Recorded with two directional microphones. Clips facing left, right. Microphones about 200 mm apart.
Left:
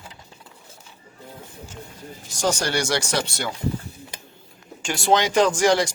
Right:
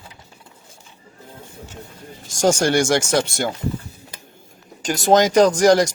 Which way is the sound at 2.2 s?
45° right (ahead or behind).